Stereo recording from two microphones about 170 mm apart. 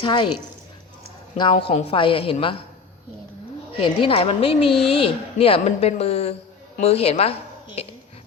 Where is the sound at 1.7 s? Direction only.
35° left (ahead or behind).